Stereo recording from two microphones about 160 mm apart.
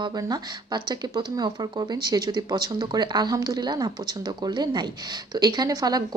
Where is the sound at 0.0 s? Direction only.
25° right (ahead or behind).